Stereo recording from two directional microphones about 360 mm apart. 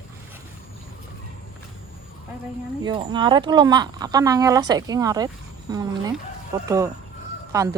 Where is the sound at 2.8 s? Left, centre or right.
Centre.